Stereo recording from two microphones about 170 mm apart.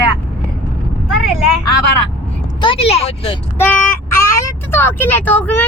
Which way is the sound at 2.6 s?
30° left (ahead or behind).